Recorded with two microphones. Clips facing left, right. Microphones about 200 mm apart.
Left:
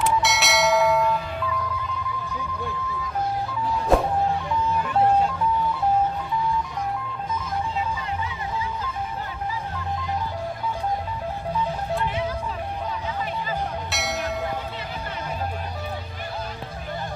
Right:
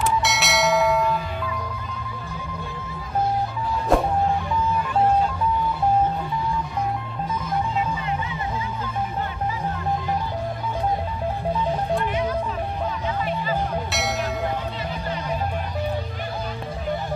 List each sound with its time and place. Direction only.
0.0 s bell: centre (ahead or behind)
3.9 s music: centre (ahead or behind)
13.9 s music: centre (ahead or behind)